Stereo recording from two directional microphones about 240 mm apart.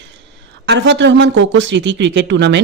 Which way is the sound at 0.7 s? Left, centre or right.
Right.